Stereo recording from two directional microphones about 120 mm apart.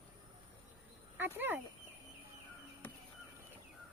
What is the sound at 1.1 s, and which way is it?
Speech, 20° right (ahead or behind).